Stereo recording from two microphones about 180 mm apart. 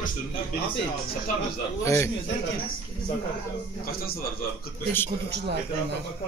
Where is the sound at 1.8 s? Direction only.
15° left (ahead or behind).